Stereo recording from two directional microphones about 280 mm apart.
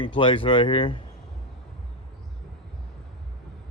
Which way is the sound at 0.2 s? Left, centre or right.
Centre.